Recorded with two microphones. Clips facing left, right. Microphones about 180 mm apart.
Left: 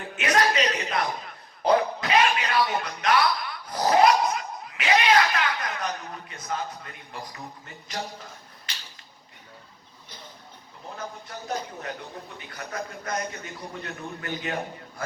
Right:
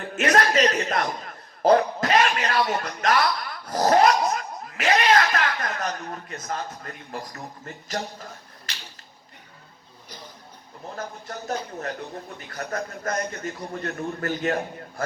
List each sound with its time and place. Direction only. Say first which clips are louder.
0.0 s chuckle: right 2 dB; 45° right (ahead or behind)
10.9 s a man's voice: right 3 dB; 45° right (ahead or behind)